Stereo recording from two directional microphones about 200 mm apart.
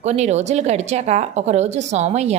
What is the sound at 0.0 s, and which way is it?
Speech, 35° right (ahead or behind).